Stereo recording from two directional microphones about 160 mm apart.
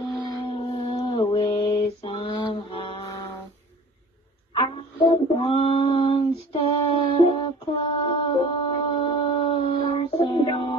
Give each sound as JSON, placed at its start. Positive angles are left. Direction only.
{"t": 0.0, "sound": "mantra", "side_deg": 30}
{"t": 5.0, "sound": "child singing", "side_deg": 35}
{"t": 7.2, "sound": "a sound", "side_deg": 35}